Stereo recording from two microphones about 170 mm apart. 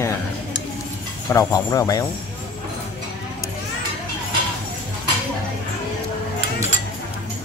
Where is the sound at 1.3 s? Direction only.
20° left (ahead or behind).